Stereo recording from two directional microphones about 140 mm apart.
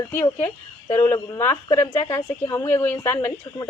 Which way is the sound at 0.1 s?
15° left (ahead or behind).